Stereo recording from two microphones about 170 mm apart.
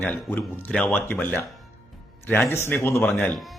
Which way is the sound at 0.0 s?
10° left (ahead or behind).